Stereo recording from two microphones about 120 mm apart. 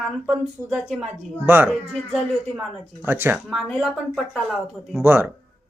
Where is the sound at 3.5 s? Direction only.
5° left (ahead or behind).